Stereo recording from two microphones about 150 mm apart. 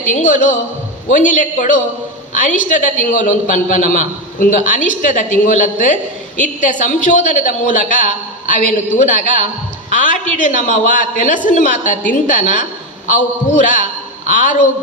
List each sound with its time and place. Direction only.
0.1 s a woman's voice: 60° left (ahead or behind)